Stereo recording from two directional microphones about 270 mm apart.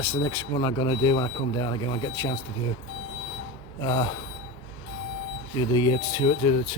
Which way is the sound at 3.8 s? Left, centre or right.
Centre.